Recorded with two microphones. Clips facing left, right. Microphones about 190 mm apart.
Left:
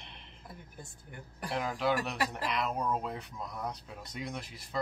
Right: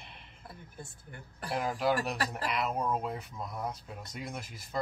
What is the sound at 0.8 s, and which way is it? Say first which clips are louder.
Speech: right 3 dB; 15° left (ahead or behind).